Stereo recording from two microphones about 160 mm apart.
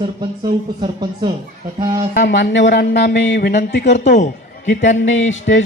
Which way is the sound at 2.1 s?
90° left.